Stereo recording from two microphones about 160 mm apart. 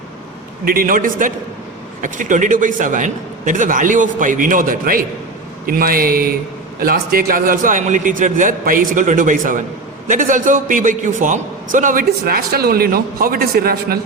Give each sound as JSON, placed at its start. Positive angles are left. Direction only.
{"t": 0.6, "sound": "a man's voice", "side_deg": -65}